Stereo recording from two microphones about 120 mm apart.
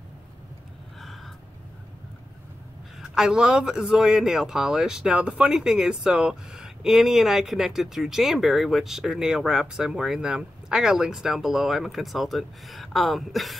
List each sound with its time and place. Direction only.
3.0 s a man's voice: 5° right (ahead or behind)